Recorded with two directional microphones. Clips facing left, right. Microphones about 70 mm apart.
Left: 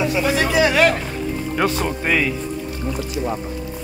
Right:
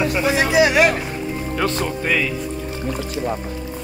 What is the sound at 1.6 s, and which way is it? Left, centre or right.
Speech, left.